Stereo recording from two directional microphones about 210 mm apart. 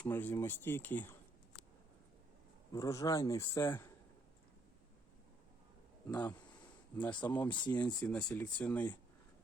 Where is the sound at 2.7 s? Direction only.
15° left (ahead or behind).